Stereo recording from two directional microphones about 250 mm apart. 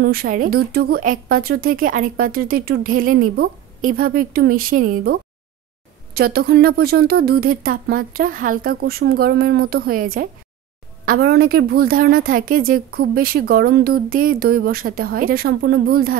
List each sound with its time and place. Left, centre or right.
0.0 s a woman's voice: right